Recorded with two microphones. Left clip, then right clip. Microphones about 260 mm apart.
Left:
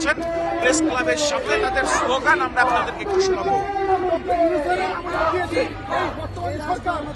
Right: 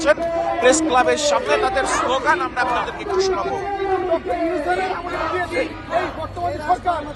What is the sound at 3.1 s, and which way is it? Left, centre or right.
Speech, centre.